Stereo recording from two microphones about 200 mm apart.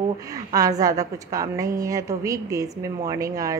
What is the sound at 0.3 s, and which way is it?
A woman's voice, 15° right (ahead or behind).